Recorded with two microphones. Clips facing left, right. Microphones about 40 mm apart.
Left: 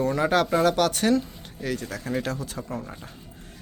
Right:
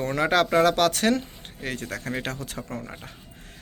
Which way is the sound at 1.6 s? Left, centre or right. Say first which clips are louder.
Left 1 dB; right.